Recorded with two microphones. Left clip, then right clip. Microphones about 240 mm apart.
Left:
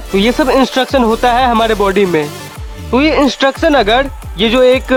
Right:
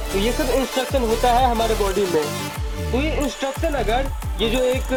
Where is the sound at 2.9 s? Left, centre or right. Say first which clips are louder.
Left 13 dB; left.